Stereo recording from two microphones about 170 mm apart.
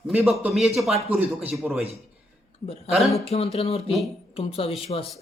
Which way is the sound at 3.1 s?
35° left (ahead or behind).